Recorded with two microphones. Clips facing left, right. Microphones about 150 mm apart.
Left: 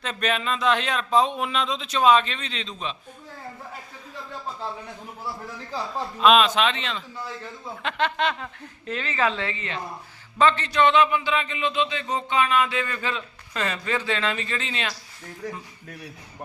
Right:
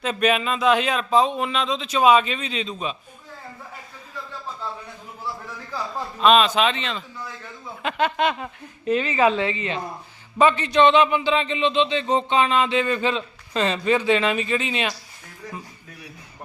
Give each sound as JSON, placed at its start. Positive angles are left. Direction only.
{"t": 0.0, "sound": "speech", "side_deg": -10}
{"t": 2.0, "sound": "speech", "side_deg": -10}
{"t": 6.1, "sound": "speech", "side_deg": 0}